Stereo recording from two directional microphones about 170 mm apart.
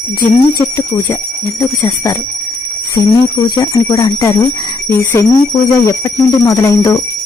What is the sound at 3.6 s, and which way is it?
A woman's voice, 20° left (ahead or behind).